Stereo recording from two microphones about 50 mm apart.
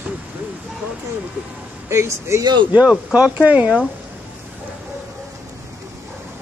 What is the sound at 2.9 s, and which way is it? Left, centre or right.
Speech, right.